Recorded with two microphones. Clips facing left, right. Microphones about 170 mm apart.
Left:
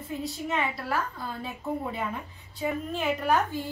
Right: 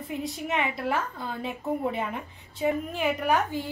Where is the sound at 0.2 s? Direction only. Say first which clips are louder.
Right 1 dB; 20° right (ahead or behind).